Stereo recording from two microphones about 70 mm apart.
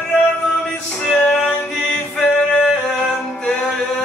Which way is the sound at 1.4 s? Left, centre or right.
Left.